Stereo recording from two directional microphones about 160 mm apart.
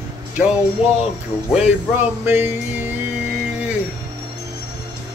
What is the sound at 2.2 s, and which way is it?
Speech, 15° right (ahead or behind).